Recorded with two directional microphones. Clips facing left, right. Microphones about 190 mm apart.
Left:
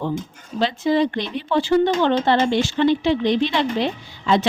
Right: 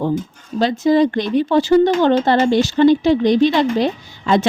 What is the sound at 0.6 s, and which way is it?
A woman's voice, 40° right (ahead or behind).